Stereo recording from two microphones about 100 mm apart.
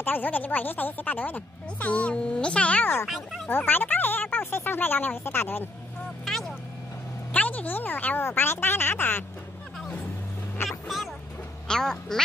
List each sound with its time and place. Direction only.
0.0 s speech: 20° left (ahead or behind)
6.2 s vehicle: 5° left (ahead or behind)
7.3 s speech: 15° left (ahead or behind)
10.7 s music: centre (ahead or behind)
11.6 s speech: 5° left (ahead or behind)